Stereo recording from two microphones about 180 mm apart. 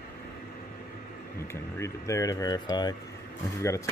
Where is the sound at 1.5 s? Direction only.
15° left (ahead or behind).